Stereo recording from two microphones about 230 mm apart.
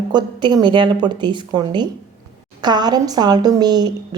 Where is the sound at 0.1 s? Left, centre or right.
Centre.